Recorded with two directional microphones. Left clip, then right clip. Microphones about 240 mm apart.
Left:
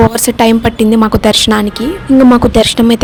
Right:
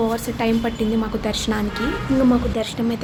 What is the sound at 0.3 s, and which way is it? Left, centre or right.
A woman's voice, left.